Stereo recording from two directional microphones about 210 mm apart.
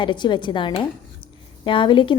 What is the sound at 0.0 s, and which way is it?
Speech, 20° left (ahead or behind).